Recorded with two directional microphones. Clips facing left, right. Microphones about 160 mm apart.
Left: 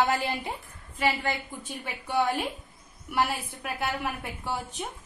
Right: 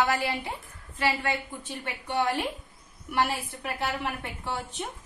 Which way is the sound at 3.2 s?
Centre (ahead or behind).